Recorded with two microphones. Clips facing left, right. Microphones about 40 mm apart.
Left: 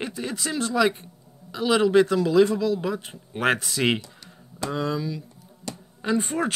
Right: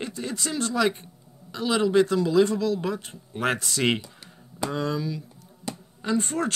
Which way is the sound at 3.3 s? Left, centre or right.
Left.